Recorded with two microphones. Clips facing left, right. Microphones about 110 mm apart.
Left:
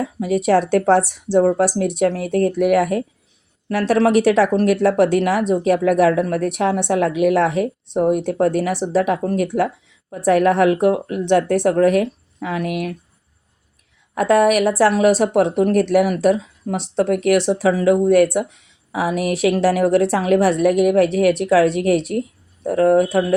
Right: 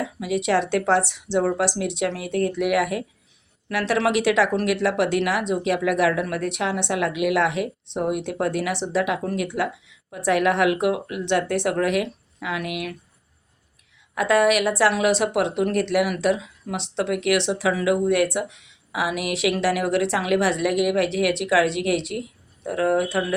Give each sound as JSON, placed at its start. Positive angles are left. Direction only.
{"t": 0.0, "sound": "speech", "side_deg": 45}
{"t": 14.2, "sound": "speech", "side_deg": 45}